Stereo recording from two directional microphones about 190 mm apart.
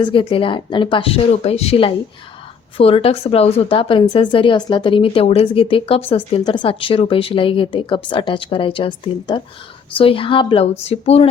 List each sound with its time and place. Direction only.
0.0 s a woman's voice: 25° left (ahead or behind)